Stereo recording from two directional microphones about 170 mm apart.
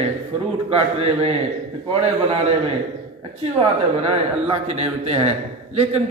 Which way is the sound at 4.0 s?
35° right (ahead or behind).